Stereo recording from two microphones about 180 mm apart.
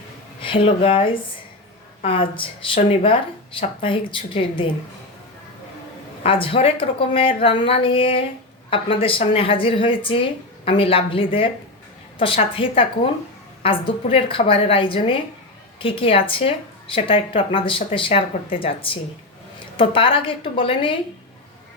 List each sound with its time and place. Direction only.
0.4 s a woman's voice: 30° left (ahead or behind)
6.2 s a woman's voice: 30° left (ahead or behind)